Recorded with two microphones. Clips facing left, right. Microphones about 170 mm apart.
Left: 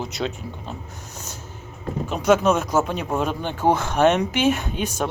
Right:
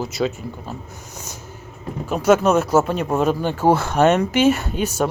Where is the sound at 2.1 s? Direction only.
5° right (ahead or behind).